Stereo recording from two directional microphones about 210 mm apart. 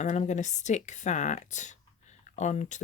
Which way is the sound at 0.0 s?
35° left (ahead or behind).